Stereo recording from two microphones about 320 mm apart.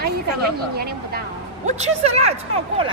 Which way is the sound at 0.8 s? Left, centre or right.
Right.